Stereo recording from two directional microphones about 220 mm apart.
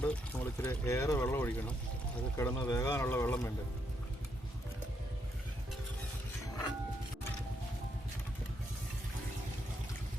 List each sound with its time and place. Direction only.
0.0 s speech: 10° left (ahead or behind)